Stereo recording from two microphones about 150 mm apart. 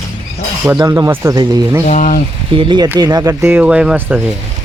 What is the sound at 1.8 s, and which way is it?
Speech, 55° left (ahead or behind).